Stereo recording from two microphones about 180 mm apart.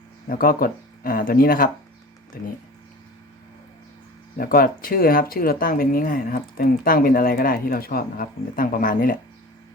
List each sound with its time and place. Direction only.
0.3 s speech: 55° left (ahead or behind)
4.4 s speech: 55° left (ahead or behind)